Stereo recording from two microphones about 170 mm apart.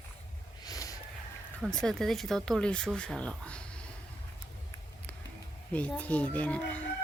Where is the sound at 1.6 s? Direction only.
Centre (ahead or behind).